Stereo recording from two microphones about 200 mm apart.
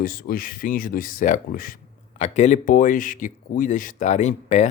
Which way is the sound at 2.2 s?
35° left (ahead or behind).